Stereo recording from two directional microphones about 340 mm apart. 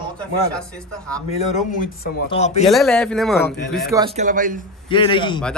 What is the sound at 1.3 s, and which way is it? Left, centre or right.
Speech, centre.